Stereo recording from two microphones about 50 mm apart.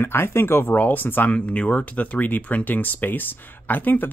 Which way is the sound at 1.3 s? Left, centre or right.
Left.